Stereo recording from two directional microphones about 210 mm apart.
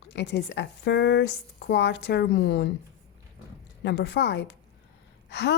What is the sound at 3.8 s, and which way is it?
A woman's voice, 55° left (ahead or behind).